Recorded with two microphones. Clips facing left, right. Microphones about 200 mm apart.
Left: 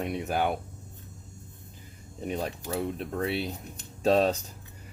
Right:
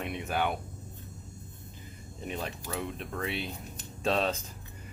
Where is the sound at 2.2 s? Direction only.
40° left (ahead or behind).